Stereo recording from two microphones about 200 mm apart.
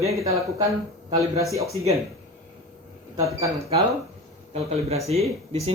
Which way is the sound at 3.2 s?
15° right (ahead or behind).